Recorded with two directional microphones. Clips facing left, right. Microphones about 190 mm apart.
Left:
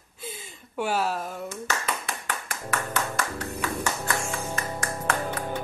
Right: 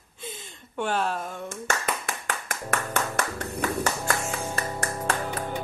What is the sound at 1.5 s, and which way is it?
Clapping, 50° right (ahead or behind).